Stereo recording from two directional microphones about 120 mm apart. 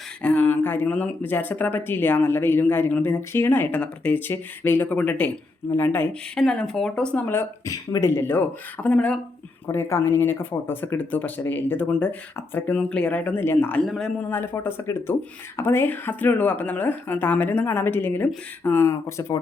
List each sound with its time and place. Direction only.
0.2 s speech: 15° left (ahead or behind)
6.3 s speech: 5° left (ahead or behind)
9.7 s speech: 20° left (ahead or behind)
13.8 s speech: centre (ahead or behind)
14.3 s speech: 20° left (ahead or behind)